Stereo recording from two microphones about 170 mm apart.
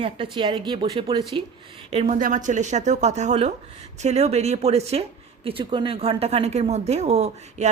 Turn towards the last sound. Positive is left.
turn(degrees=-40)  # may be behind; listen again after turning